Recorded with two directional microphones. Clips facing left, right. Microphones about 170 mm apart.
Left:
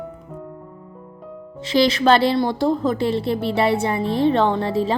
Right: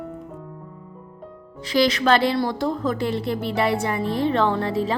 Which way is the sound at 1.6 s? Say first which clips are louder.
Left 3 dB; 25° left (ahead or behind).